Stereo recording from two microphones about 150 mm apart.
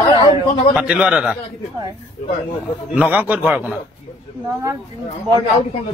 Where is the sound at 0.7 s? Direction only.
5° right (ahead or behind).